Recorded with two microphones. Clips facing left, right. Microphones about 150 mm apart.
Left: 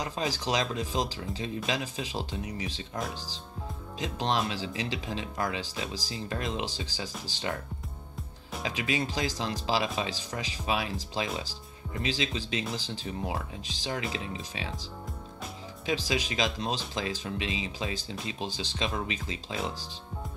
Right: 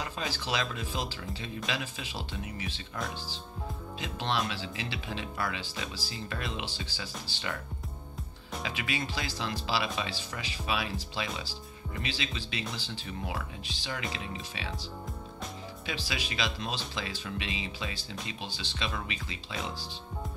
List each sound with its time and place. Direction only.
0.0 s speech: 40° left (ahead or behind)
8.6 s speech: 40° left (ahead or behind)
15.9 s speech: 40° left (ahead or behind)